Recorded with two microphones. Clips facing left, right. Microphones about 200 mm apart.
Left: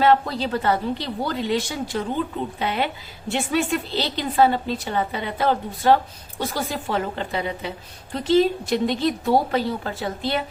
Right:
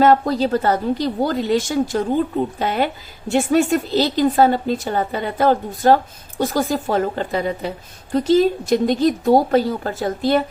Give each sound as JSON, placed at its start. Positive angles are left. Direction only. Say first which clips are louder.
{"t": 0.0, "sound": "a woman's voice", "louder": "right 4 dB", "side_deg": -45}